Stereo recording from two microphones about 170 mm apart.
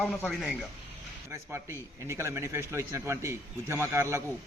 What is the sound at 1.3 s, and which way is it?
A man's voice, 15° right (ahead or behind).